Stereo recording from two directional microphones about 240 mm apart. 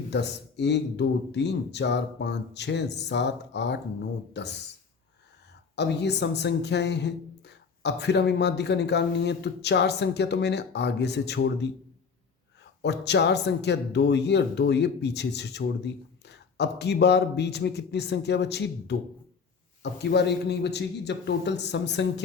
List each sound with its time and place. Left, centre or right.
0.1 s speech: left
5.7 s speech: left
12.8 s speech: left